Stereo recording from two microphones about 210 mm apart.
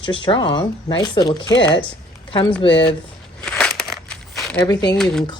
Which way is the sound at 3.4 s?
5° left (ahead or behind).